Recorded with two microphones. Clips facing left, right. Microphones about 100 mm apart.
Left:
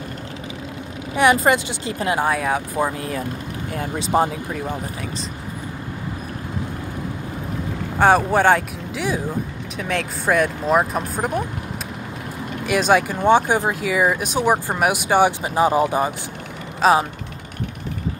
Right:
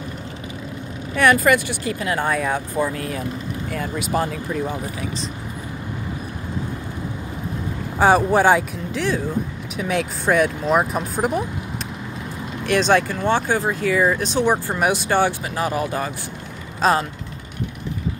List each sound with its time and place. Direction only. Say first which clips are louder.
1.1 s speech: even; 20° left (ahead or behind)
2.1 s speech: left 1 dB; 5° left (ahead or behind)
3.7 s speech: left 1 dB; 45° left (ahead or behind)
4.0 s speech: left 5 dB; 25° left (ahead or behind)
8.0 s speech: even; centre (ahead or behind)
12.6 s speech: even; 10° left (ahead or behind)
16.8 s speech: left 2 dB; 5° left (ahead or behind)